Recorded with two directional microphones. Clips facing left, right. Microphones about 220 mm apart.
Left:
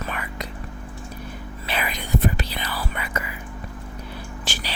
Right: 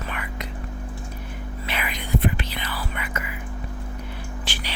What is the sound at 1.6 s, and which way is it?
Whispering, 35° left (ahead or behind).